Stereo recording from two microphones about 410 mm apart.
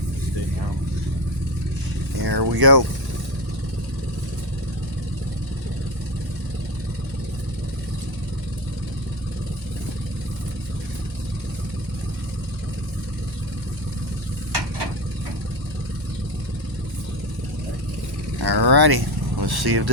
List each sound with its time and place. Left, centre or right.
2.2 s speech: right
18.3 s vehicle: right